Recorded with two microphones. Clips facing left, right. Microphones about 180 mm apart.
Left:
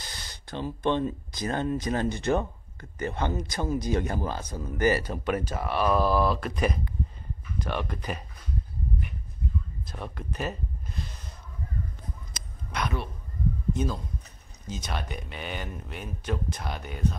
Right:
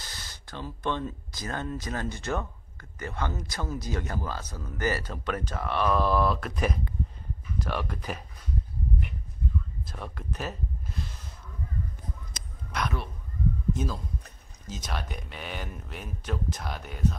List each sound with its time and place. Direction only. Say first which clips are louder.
0.2 s speech: left 6 dB; 20° left (ahead or behind); by 8.2 s centre (ahead or behind)
9.8 s speech: left 1 dB; centre (ahead or behind)
12.7 s speech: left 1 dB; centre (ahead or behind)